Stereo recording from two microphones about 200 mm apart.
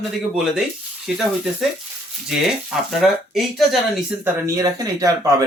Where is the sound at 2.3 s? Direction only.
Centre (ahead or behind).